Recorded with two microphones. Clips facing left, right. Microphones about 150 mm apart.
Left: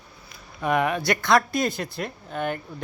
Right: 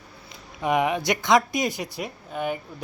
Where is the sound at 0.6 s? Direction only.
15° right (ahead or behind).